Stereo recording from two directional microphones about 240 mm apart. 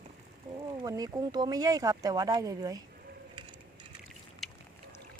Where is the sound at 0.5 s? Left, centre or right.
Centre.